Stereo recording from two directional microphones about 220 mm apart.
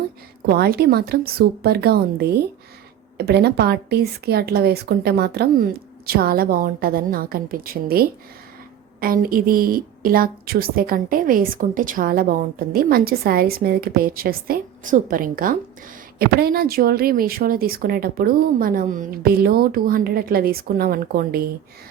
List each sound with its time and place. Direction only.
0.4 s a woman's voice: 45° right (ahead or behind)